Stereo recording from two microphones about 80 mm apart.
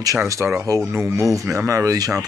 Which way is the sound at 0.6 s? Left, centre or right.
Right.